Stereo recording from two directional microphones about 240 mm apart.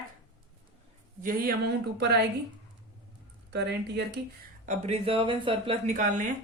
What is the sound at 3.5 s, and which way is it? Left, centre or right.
Speech, right.